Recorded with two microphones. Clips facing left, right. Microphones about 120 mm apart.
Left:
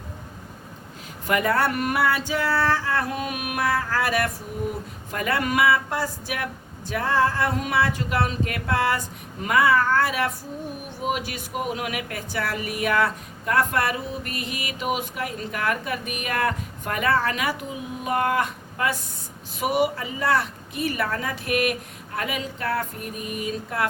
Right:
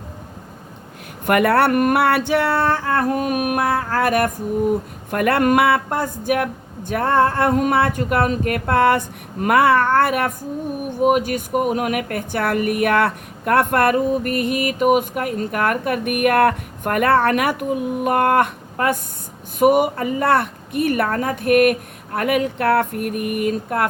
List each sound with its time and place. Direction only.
1.3 s speech: 65° right (ahead or behind)